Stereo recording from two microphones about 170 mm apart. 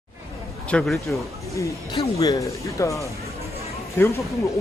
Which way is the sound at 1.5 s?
20° left (ahead or behind).